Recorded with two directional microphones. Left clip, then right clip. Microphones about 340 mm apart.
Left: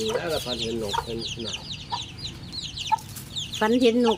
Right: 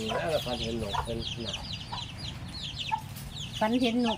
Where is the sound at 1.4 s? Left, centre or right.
Centre.